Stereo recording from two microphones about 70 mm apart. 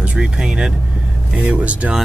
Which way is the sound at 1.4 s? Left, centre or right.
Right.